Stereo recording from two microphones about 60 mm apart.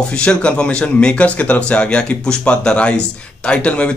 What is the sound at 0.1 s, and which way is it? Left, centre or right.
A man's voice, centre.